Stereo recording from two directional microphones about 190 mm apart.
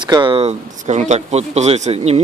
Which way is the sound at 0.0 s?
25° right (ahead or behind).